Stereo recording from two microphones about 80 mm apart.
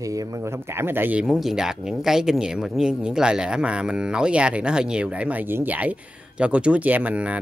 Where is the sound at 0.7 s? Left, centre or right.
Right.